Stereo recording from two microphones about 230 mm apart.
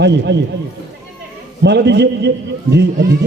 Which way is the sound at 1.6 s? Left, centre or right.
Right.